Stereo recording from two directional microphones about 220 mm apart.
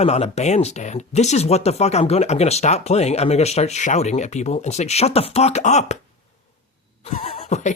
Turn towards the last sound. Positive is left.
turn(degrees=30)  # may be behind; listen again after turning